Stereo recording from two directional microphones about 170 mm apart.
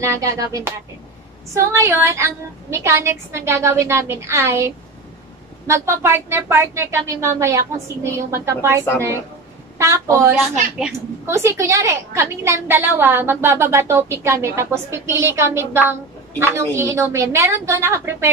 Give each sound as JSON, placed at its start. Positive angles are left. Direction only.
{"t": 0.0, "sound": "music", "side_deg": -20}
{"t": 1.5, "sound": "a woman's voice", "side_deg": -15}